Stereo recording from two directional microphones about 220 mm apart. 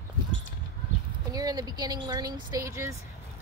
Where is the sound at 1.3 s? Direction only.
15° right (ahead or behind).